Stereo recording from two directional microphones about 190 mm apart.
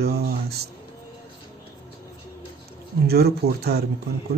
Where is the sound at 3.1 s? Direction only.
55° right (ahead or behind).